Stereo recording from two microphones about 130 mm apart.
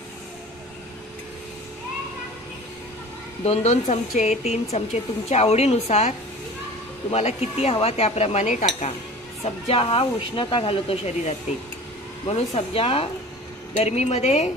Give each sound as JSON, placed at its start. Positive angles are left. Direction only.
{"t": 3.4, "sound": "speech", "side_deg": 60}
{"t": 9.4, "sound": "speech", "side_deg": 45}